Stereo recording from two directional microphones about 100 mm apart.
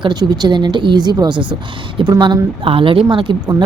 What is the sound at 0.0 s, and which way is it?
Speech, 45° right (ahead or behind).